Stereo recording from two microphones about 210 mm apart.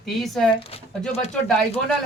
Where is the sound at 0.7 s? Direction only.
30° left (ahead or behind).